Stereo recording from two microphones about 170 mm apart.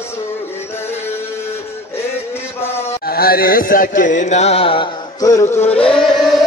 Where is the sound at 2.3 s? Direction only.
15° left (ahead or behind).